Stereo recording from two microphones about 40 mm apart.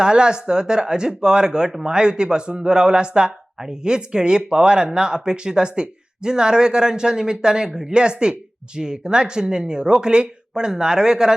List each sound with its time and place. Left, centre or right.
0.0 s speech: right